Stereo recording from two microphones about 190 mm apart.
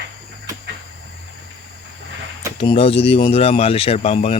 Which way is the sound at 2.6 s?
30° left (ahead or behind).